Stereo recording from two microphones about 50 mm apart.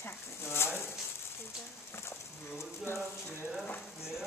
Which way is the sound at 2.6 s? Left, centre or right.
Left.